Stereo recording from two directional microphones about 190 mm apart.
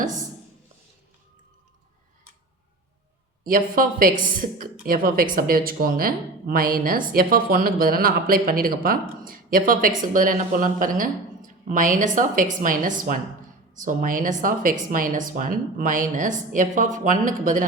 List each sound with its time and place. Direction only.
3.4 s speech: 50° right (ahead or behind)